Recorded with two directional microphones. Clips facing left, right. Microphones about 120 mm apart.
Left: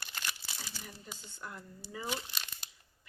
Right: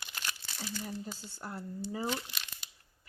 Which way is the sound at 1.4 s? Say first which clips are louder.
Right 8 dB; 35° right (ahead or behind).